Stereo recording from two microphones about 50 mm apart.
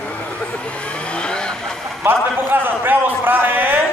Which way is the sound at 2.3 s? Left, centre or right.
Right.